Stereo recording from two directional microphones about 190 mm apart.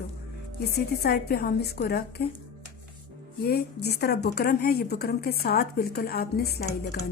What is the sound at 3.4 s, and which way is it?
A woman's voice, 55° left (ahead or behind).